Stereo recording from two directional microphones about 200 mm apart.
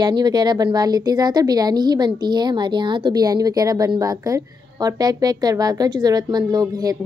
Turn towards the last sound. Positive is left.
turn(degrees=-20)  # may be behind; listen again after turning